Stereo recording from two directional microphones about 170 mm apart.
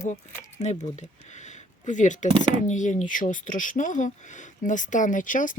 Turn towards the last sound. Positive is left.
turn(degrees=50)  # may be behind; listen again after turning